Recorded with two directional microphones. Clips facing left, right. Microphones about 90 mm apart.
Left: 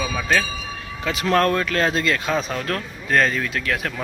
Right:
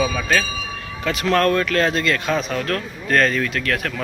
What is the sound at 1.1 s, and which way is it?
Speech, 25° left (ahead or behind).